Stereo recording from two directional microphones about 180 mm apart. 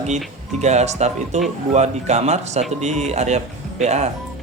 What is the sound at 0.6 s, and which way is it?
Speech, 40° right (ahead or behind).